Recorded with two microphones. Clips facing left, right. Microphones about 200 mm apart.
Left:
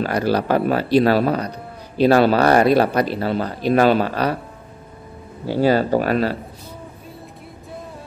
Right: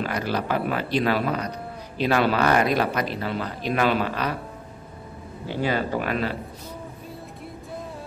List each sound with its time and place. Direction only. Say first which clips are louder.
0.0 s speech: left 7 dB; 35° left (ahead or behind)
5.5 s speech: left 8 dB; 40° left (ahead or behind)